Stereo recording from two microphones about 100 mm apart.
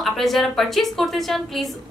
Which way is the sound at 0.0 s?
Centre (ahead or behind).